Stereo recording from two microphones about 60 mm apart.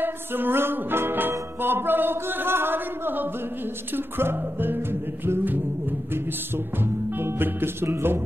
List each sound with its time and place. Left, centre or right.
0.0 s music: right
1.6 s a sound: right
3.9 s music: right